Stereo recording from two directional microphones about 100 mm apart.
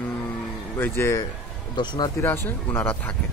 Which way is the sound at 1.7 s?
50° left (ahead or behind).